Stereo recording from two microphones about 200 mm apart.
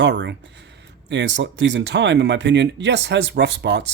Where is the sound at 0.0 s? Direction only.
65° right (ahead or behind).